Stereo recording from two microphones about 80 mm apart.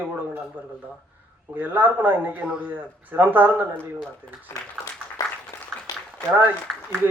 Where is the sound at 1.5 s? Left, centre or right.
Right.